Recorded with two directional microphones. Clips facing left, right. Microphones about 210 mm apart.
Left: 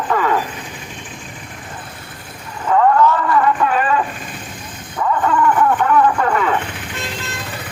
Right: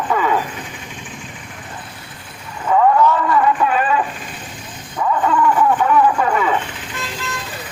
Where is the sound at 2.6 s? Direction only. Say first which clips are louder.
Even; 5° right (ahead or behind).